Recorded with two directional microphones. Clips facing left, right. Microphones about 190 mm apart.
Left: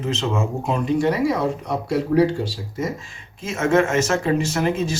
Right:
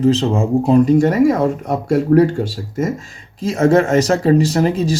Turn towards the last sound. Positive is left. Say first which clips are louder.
# right 6 dB
turn(degrees=-35)  # may be behind; listen again after turning